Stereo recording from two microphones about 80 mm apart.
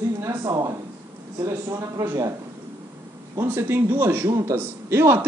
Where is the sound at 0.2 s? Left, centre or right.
Right.